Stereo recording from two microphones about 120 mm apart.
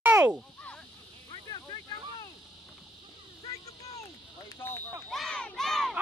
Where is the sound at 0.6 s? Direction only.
10° left (ahead or behind).